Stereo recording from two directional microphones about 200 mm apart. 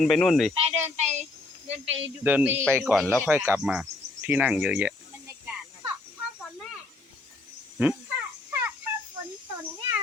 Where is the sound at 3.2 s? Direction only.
10° right (ahead or behind).